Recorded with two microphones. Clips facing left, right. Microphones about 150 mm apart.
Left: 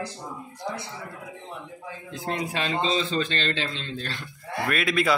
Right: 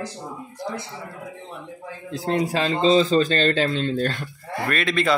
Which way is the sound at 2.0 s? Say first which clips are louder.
Right 7 dB; 30° right (ahead or behind).